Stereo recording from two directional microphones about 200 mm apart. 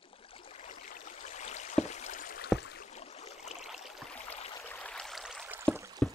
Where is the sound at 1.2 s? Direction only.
35° left (ahead or behind).